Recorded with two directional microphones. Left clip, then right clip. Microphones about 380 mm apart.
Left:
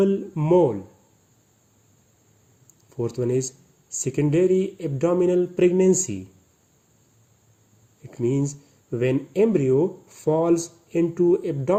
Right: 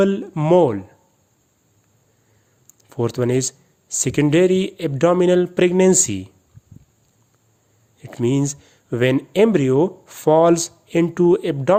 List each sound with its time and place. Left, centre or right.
0.0 s speech: right
2.6 s speech: right
8.0 s speech: right